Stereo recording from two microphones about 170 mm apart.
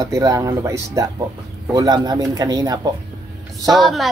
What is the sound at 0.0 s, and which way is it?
Speech, 20° right (ahead or behind).